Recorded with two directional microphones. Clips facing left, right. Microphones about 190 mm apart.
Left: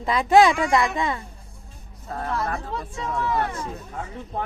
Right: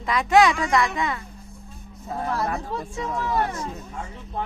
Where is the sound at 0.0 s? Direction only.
30° left (ahead or behind).